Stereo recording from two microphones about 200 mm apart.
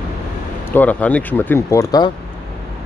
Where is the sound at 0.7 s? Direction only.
10° left (ahead or behind).